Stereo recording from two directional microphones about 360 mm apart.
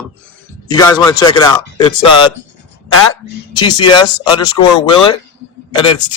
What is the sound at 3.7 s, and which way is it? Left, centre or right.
Speech, left.